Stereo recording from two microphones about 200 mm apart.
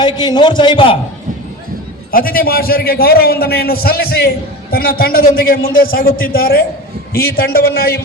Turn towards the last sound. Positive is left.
turn(degrees=50)  # may be behind; listen again after turning